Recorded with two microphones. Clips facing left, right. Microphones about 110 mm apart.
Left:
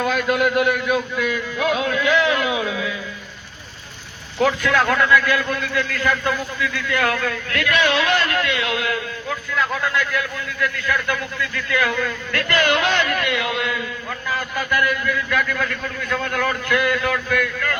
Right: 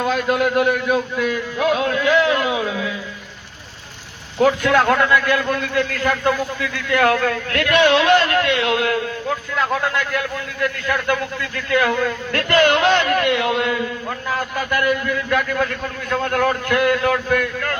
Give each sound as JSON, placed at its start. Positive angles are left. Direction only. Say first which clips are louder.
{"t": 0.0, "sound": "a man's voice", "louder": "right 1 dB", "side_deg": -30}
{"t": 1.8, "sound": "music", "louder": "right 1 dB", "side_deg": -30}
{"t": 2.4, "sound": "a sound", "louder": "right 1 dB", "side_deg": -30}
{"t": 4.6, "sound": "a man's voice", "louder": "right 3 dB", "side_deg": -25}
{"t": 5.5, "sound": "a man's voice", "louder": "right 3 dB", "side_deg": -45}
{"t": 6.6, "sound": "a man's voice", "louder": "right 3 dB", "side_deg": -50}
{"t": 7.7, "sound": "a man's voice", "louder": "right 5 dB", "side_deg": -25}
{"t": 14.3, "sound": "a man's voice", "louder": "right 2 dB", "side_deg": -45}
{"t": 14.7, "sound": "a man's voice", "louder": "right 1 dB", "side_deg": -30}